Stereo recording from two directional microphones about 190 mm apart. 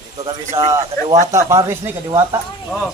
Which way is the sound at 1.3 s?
15° right (ahead or behind).